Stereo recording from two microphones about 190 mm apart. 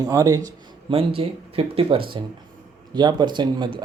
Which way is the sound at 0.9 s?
30° right (ahead or behind).